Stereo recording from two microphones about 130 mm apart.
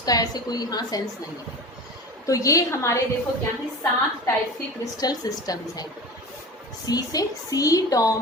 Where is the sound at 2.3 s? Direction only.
25° left (ahead or behind).